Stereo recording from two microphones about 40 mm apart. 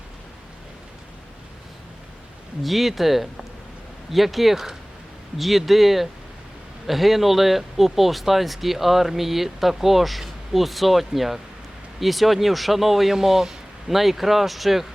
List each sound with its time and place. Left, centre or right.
2.6 s speech: centre